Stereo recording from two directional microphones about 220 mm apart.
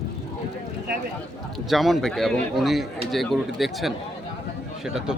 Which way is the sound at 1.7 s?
Centre (ahead or behind).